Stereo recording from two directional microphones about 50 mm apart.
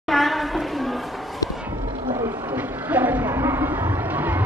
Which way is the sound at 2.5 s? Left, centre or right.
Right.